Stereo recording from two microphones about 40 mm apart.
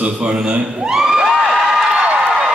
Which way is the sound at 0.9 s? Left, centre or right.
Centre.